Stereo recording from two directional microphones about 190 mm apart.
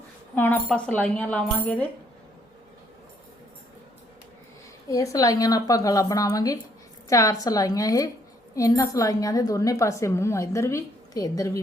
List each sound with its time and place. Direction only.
0.3 s a woman's voice: 10° left (ahead or behind)
4.9 s a woman's voice: 15° left (ahead or behind)